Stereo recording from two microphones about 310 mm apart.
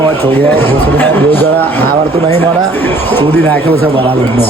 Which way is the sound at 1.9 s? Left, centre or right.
Right.